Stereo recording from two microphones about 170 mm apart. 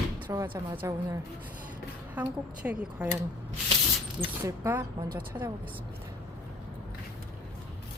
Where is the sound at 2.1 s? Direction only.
10° right (ahead or behind).